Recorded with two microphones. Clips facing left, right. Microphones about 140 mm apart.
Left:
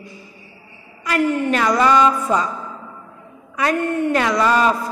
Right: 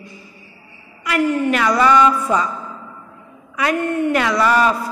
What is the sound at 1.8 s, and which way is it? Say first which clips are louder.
Speech: right 2 dB; 25° left (ahead or behind).